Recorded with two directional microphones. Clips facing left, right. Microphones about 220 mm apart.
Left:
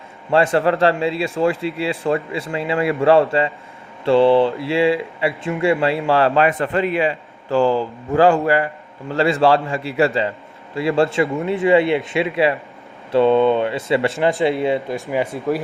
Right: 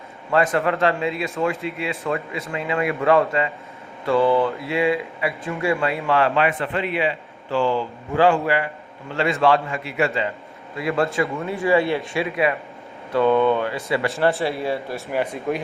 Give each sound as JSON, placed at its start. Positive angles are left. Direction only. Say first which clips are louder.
{"t": 0.3, "sound": "speech", "louder": "left 4 dB", "side_deg": 30}